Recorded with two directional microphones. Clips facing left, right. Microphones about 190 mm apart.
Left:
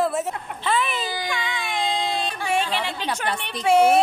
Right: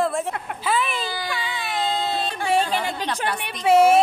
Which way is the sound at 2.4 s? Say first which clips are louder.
Right 3 dB; 40° right (ahead or behind).